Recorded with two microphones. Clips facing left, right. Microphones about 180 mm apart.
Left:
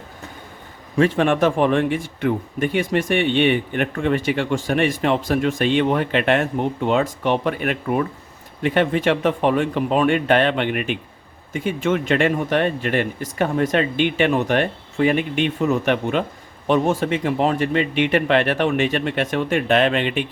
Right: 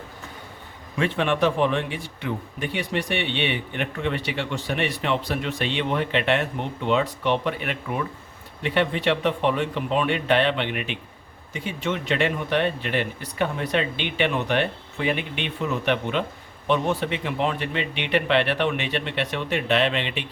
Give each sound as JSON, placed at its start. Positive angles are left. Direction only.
{"t": 0.9, "sound": "a man's voice", "side_deg": 40}